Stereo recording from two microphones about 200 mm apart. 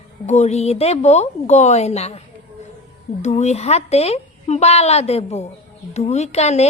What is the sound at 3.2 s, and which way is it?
A woman's voice, 35° left (ahead or behind).